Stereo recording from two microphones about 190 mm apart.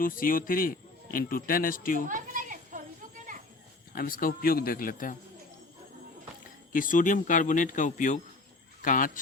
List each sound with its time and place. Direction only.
0.0 s a man's voice: 45° left (ahead or behind)
2.0 s children playing: 45° right (ahead or behind)
3.9 s a man's voice: 50° left (ahead or behind)
6.7 s a man's voice: 45° left (ahead or behind)